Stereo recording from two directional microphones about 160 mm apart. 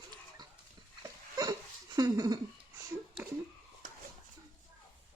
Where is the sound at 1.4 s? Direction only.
25° right (ahead or behind).